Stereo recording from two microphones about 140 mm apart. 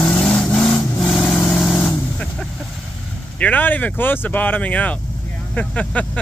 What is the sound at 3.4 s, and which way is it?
Speech, 10° left (ahead or behind).